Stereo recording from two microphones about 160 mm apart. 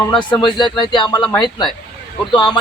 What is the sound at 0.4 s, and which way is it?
Speech, 30° left (ahead or behind).